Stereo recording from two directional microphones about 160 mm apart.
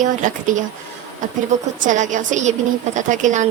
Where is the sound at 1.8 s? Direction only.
50° right (ahead or behind).